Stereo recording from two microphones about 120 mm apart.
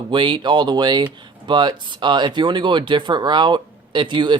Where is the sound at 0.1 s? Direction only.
40° right (ahead or behind).